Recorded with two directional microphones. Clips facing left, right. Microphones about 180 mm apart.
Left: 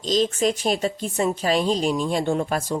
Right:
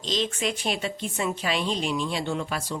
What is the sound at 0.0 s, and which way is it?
Speech, 40° left (ahead or behind).